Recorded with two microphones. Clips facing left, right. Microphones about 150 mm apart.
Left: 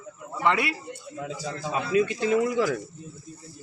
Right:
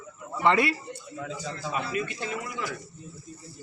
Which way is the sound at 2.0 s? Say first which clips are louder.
Left 10 dB; 90° left.